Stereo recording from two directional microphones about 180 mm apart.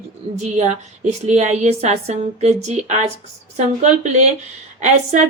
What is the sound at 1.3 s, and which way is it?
A woman's voice, 40° right (ahead or behind).